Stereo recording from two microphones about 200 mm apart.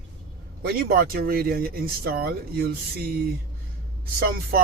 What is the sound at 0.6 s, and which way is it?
Speech, 50° right (ahead or behind).